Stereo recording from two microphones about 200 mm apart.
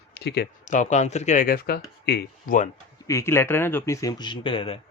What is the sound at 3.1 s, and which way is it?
Speech, 15° left (ahead or behind).